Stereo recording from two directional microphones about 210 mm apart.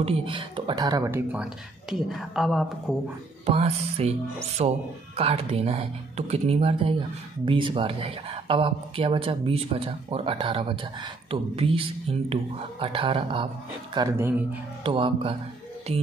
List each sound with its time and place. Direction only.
0.0 s speech: 25° right (ahead or behind); by 3.0 s centre (ahead or behind)
3.4 s speech: 30° right (ahead or behind)
13.9 s speech: 15° right (ahead or behind)
14.8 s speech: 25° right (ahead or behind)